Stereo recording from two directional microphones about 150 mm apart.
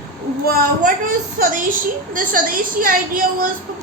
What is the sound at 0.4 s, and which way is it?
Speech, 90° right.